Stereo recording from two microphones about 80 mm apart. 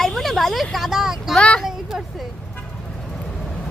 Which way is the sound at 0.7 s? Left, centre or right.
Centre.